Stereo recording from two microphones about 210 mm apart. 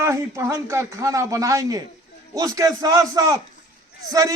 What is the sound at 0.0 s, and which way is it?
A man's voice, 15° right (ahead or behind).